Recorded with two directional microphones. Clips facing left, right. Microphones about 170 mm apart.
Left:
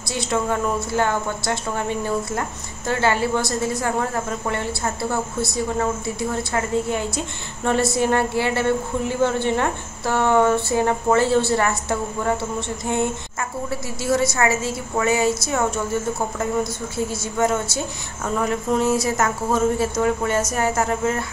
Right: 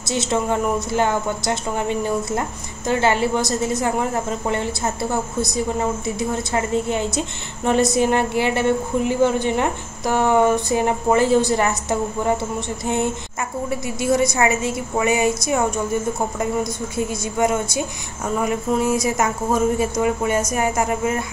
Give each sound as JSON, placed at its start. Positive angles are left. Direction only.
{"t": 0.0, "sound": "speech", "side_deg": -20}
{"t": 16.9, "sound": "speech", "side_deg": -15}